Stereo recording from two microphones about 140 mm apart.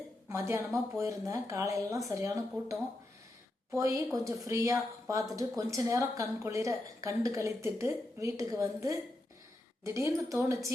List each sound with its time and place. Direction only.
0.3 s speech: 20° right (ahead or behind)